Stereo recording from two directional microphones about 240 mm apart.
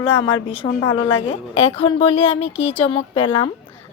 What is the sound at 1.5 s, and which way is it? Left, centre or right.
Speech, left.